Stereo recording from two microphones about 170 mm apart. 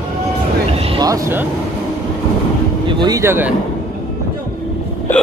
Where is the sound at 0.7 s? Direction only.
35° right (ahead or behind).